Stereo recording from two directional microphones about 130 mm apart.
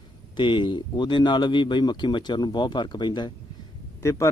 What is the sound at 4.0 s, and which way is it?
Speech, 25° left (ahead or behind).